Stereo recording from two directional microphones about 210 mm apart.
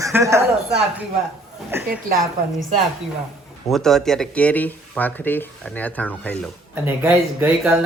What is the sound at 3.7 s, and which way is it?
Speech, centre (ahead or behind).